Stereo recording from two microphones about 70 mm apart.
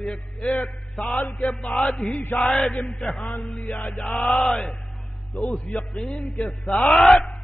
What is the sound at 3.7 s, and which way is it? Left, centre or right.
Speech, left.